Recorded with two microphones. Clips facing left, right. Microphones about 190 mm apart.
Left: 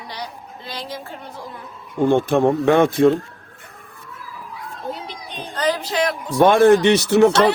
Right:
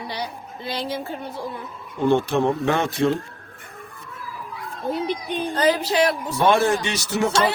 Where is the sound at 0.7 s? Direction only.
25° right (ahead or behind).